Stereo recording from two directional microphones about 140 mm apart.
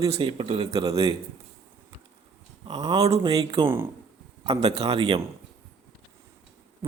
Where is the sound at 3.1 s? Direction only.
35° right (ahead or behind).